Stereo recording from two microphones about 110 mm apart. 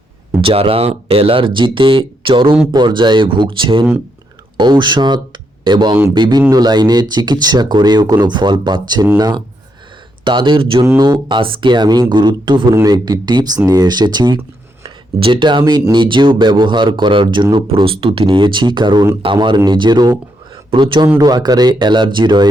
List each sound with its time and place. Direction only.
0.4 s speech: 60° right (ahead or behind); by 14.3 s 40° right (ahead or behind)
14.8 s speech: 50° right (ahead or behind)